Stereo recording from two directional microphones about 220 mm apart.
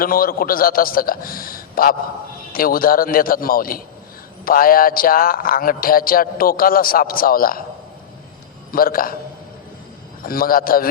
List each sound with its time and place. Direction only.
0.0 s a man's voice: 40° left (ahead or behind)
8.7 s a man's voice: 40° left (ahead or behind)
10.2 s a man's voice: 40° left (ahead or behind)